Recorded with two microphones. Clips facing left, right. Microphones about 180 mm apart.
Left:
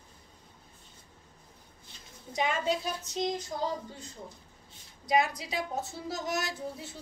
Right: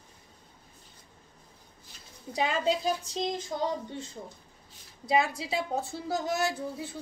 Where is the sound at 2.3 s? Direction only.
30° right (ahead or behind).